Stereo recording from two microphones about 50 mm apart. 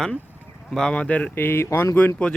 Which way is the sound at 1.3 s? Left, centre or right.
Left.